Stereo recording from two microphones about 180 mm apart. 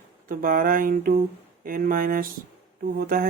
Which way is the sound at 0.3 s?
50° right (ahead or behind).